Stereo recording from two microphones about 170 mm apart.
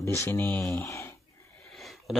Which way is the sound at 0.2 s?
10° left (ahead or behind).